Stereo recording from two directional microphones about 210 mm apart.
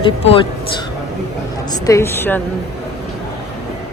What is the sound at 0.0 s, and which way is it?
Speech, 25° left (ahead or behind).